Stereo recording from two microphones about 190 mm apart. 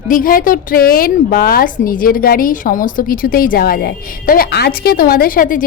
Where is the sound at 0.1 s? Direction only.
45° left (ahead or behind).